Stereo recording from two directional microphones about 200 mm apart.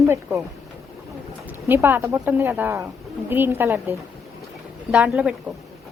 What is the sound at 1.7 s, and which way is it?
Speech, 10° right (ahead or behind).